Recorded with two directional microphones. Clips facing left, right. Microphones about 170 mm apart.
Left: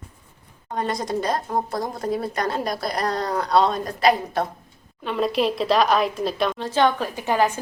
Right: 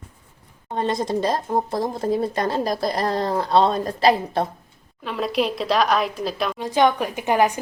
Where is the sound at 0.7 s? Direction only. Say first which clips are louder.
Right 2 dB; 25° right (ahead or behind).